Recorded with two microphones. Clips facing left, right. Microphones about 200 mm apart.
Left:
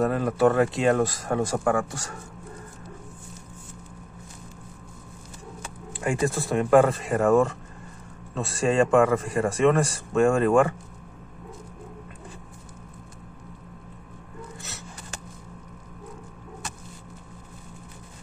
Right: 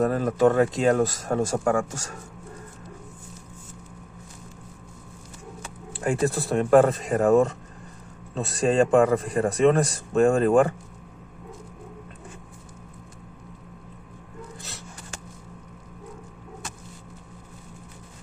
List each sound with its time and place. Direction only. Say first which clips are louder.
0.0 s speech: right 1 dB; 40° right (ahead or behind)
5.9 s speech: right 1 dB; 40° right (ahead or behind)